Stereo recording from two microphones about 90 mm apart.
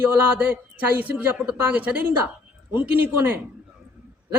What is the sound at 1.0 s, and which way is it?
A woman's voice, 20° right (ahead or behind).